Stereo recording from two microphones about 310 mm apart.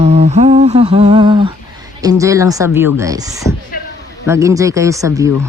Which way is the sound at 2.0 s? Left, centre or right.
Centre.